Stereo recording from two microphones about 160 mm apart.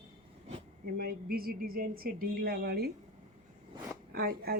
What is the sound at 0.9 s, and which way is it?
Speech, 70° right (ahead or behind).